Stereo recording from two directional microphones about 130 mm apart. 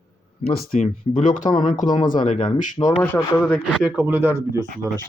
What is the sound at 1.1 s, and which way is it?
Speech, 90° left.